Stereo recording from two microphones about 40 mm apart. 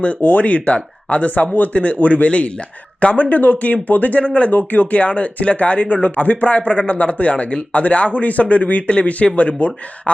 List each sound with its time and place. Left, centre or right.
0.2 s speech: left